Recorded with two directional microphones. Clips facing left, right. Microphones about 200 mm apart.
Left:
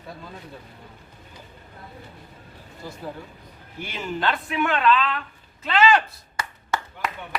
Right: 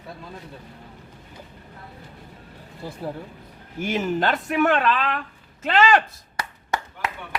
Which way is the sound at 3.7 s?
45° right (ahead or behind).